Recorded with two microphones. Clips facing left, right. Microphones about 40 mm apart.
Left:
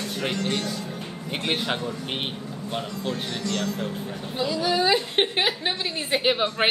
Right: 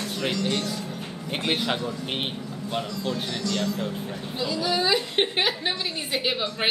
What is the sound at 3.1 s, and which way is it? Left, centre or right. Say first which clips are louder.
Music: even; left.